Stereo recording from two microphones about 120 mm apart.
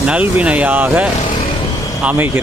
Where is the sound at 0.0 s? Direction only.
10° right (ahead or behind).